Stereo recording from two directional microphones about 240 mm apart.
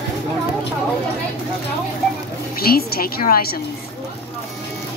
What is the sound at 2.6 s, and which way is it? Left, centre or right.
A woman's voice, left.